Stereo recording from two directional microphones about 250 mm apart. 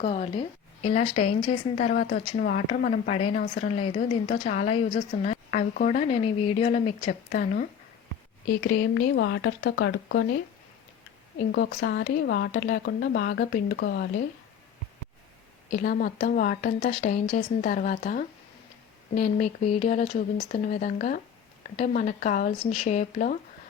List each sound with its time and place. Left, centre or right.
0.0 s a woman's voice: left
8.6 s speech: left
11.5 s speech: left
15.7 s a woman's voice: left